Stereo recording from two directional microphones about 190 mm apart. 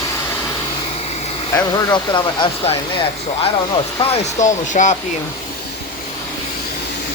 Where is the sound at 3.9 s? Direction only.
35° left (ahead or behind).